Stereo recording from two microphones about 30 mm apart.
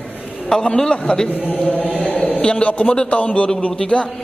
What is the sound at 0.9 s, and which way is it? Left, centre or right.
Speech, left.